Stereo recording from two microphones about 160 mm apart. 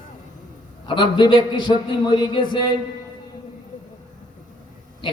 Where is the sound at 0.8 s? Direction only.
30° left (ahead or behind).